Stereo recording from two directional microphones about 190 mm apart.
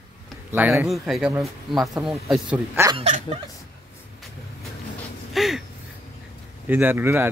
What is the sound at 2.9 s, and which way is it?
Speech, 35° right (ahead or behind).